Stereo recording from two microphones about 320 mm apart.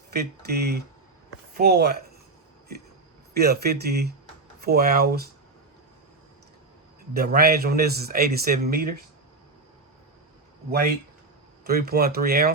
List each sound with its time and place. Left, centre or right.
0.1 s a man's voice: right
3.3 s a man's voice: right
7.1 s a man's voice: right
10.7 s a man's voice: right